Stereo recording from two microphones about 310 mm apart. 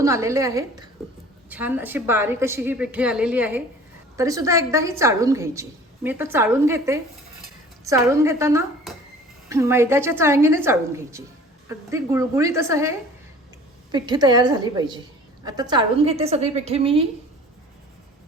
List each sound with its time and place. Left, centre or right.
0.0 s a woman's voice: centre
13.9 s a woman's voice: centre